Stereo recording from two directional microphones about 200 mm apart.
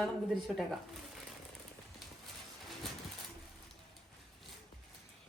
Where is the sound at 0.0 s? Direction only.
Centre (ahead or behind).